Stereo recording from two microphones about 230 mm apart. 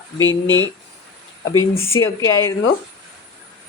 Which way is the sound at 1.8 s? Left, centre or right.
Centre.